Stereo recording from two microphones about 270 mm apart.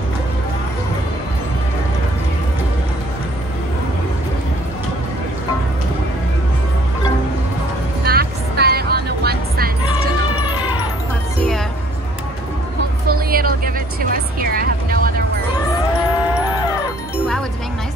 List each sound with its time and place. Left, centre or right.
8.0 s music: right
10.4 s music: centre
13.3 s vehicle: right